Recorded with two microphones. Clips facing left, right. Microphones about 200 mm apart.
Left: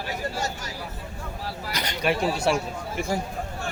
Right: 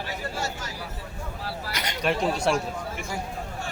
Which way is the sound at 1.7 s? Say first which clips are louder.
Left 3 dB; 35° left (ahead or behind).